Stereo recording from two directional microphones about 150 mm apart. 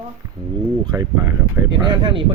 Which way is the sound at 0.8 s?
25° right (ahead or behind).